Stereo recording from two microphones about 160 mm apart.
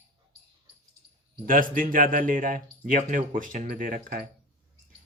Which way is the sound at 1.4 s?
60° right (ahead or behind).